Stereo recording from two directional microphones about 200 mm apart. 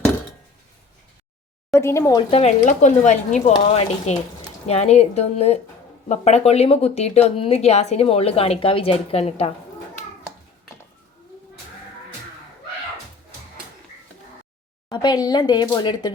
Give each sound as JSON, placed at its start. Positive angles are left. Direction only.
{"t": 1.7, "sound": "speech", "side_deg": 15}
{"t": 2.3, "sound": "speech", "side_deg": 35}
{"t": 14.8, "sound": "speech", "side_deg": 20}